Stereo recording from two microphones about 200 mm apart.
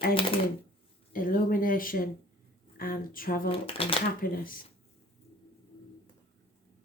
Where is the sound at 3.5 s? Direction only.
30° left (ahead or behind).